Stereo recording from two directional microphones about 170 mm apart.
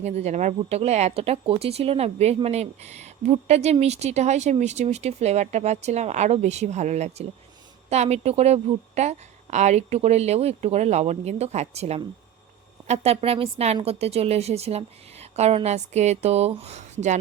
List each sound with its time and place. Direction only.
0.0 s speech: 40° right (ahead or behind)